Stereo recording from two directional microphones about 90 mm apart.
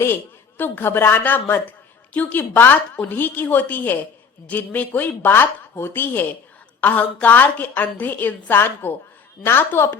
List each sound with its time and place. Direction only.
0.0 s a woman's voice: 25° left (ahead or behind)